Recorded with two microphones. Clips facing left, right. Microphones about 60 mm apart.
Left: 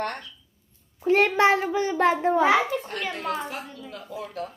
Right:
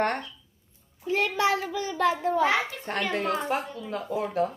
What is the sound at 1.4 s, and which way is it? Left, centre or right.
Speech, left.